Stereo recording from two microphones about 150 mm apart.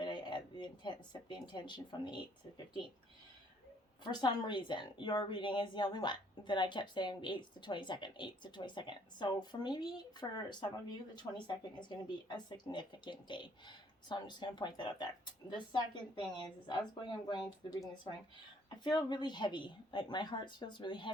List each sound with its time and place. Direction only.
0.0 s speech: 30° left (ahead or behind)
4.0 s a woman's voice: 30° left (ahead or behind)